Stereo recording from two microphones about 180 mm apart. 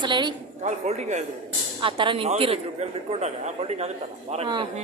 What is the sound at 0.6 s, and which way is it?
Speech, 40° right (ahead or behind).